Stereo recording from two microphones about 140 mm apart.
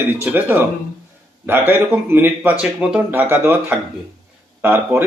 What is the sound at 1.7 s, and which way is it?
Speech, 15° right (ahead or behind).